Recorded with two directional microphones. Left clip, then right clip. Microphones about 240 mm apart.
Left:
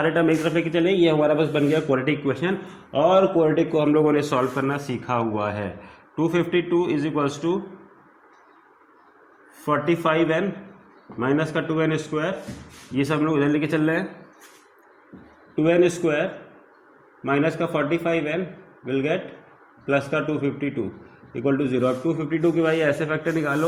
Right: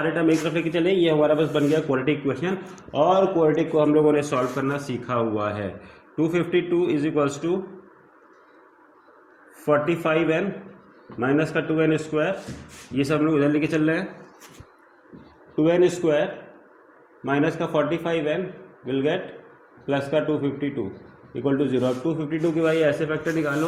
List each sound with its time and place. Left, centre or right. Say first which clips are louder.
0.0 s a man's voice: left 2 dB; left
9.6 s a man's voice: even; centre
15.5 s a man's voice: even; centre
17.2 s a man's voice: left 1 dB; centre